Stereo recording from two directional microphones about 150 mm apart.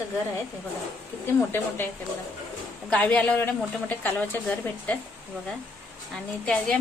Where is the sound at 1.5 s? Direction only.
15° left (ahead or behind).